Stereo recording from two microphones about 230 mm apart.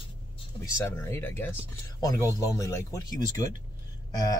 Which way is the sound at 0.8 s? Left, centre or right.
Centre.